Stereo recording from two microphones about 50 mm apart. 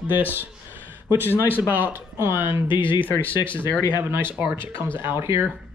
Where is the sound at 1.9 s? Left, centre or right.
Right.